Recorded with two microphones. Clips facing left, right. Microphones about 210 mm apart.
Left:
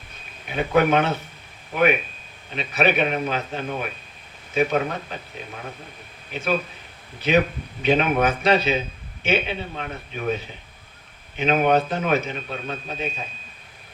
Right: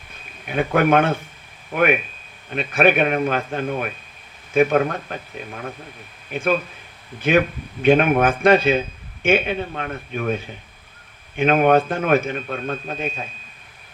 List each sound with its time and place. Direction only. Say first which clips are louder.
0.4 s a man's voice: right 1 dB; 55° right (ahead or behind)
6.3 s a man's voice: right 3 dB; 50° right (ahead or behind)